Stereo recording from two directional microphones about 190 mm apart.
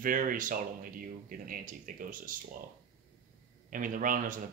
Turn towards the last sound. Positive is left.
turn(degrees=-45)  # may be behind; listen again after turning